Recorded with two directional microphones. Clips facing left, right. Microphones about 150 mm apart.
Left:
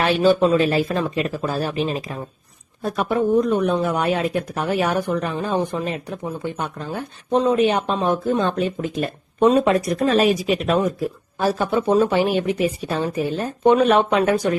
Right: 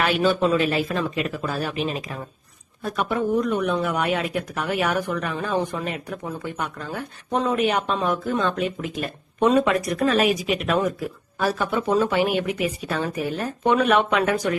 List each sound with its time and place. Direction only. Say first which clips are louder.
0.0 s speech: left 4 dB; 30° left (ahead or behind)